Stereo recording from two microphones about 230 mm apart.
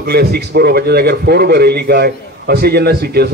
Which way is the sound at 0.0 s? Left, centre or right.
Right.